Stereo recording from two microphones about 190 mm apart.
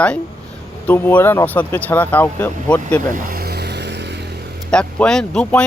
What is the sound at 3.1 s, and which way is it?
Vehicle, 50° right (ahead or behind).